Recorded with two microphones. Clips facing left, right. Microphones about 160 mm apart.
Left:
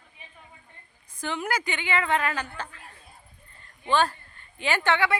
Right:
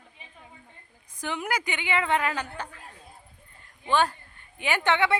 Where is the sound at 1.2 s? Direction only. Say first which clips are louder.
Left 1 dB; 15° right (ahead or behind).